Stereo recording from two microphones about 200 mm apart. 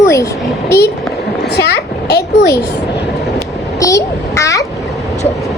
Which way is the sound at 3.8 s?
15° left (ahead or behind).